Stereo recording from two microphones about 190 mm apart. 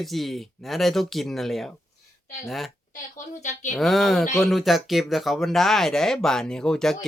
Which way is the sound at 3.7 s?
Centre (ahead or behind).